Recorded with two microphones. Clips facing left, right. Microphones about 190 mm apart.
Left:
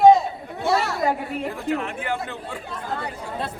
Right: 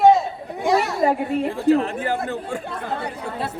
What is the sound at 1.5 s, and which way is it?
Speech, 30° right (ahead or behind).